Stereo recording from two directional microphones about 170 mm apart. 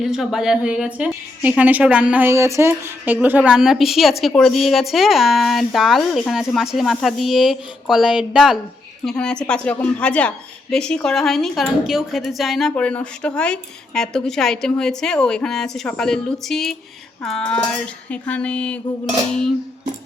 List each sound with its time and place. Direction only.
0.0 s a woman's voice: centre (ahead or behind)
17.2 s a sound: 5° left (ahead or behind)
19.3 s a woman's voice: 5° left (ahead or behind)